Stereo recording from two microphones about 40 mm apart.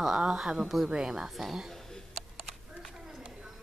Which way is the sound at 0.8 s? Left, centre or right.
Centre.